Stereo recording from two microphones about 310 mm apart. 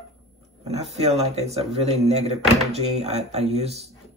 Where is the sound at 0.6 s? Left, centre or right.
Right.